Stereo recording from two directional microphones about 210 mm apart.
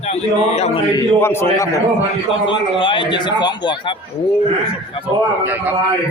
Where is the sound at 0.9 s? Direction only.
15° left (ahead or behind).